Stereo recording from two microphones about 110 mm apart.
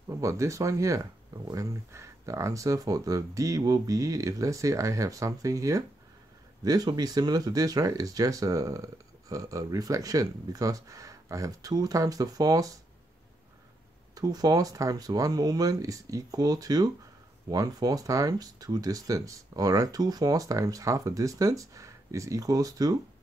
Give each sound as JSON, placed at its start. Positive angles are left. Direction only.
{"t": 0.1, "sound": "speech", "side_deg": -30}
{"t": 14.1, "sound": "speech", "side_deg": -35}